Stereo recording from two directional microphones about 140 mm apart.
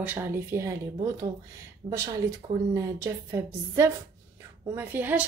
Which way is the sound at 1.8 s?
20° right (ahead or behind).